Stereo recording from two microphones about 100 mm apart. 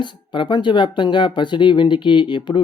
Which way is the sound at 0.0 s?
50° left (ahead or behind).